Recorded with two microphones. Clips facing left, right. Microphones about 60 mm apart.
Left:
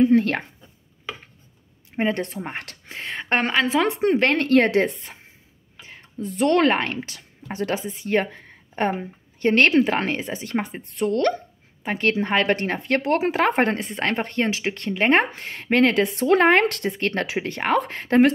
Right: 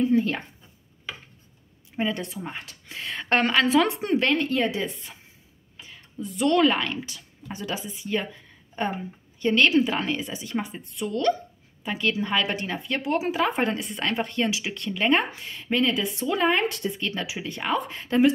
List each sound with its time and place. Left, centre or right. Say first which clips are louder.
0.0 s a woman's voice: left 5 dB; left
2.0 s speech: left 4 dB; left
2.9 s a woman's voice: left 1 dB; left
4.2 s speech: left 3 dB; left
4.5 s a woman's voice: left 8 dB; left
5.8 s speech: left 3 dB; left